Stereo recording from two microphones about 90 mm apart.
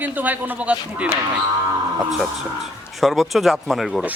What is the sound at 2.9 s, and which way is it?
Speech, centre (ahead or behind).